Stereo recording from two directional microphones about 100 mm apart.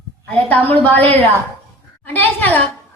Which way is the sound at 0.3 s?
15° left (ahead or behind).